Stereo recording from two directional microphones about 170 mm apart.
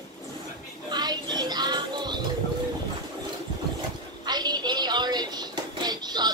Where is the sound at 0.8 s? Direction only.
25° right (ahead or behind).